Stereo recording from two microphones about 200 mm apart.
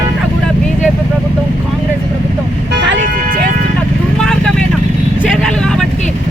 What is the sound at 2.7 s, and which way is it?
Speech, 60° right (ahead or behind).